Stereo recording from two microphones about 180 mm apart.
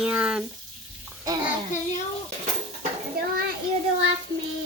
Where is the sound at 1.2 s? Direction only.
25° right (ahead or behind).